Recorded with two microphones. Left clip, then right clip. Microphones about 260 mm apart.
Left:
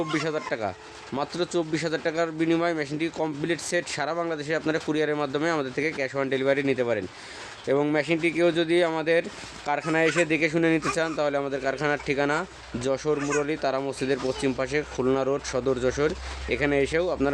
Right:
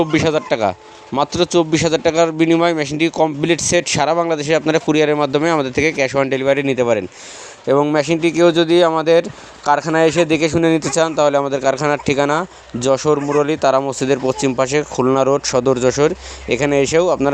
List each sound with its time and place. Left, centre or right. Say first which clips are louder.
0.0 s speech: right 12 dB; right